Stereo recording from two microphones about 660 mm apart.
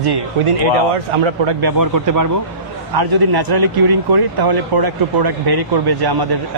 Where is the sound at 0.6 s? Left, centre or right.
Right.